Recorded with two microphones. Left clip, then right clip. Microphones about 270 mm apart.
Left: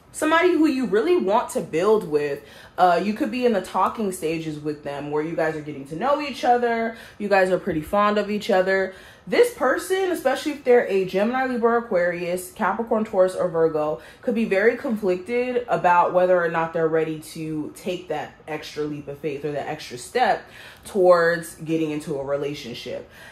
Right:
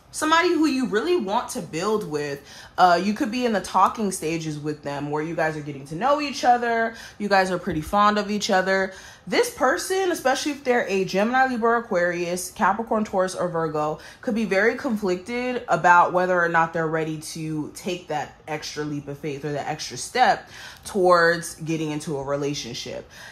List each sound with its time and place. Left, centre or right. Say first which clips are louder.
0.2 s speech: left 1 dB; centre